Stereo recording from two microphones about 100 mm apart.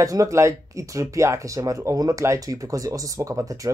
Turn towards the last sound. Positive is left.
turn(degrees=-35)  # may be behind; listen again after turning